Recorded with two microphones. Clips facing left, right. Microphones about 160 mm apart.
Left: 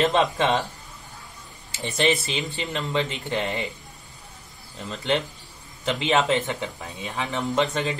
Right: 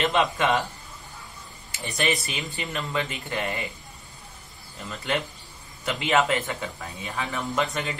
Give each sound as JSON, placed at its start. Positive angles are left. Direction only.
{"t": 0.0, "sound": "speech", "side_deg": 35}
{"t": 1.7, "sound": "speech", "side_deg": 25}
{"t": 4.8, "sound": "speech", "side_deg": 25}